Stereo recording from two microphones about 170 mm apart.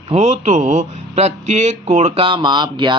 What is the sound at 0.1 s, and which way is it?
Speech, 40° right (ahead or behind).